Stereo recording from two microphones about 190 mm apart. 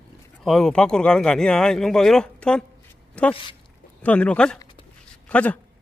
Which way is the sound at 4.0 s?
5° left (ahead or behind).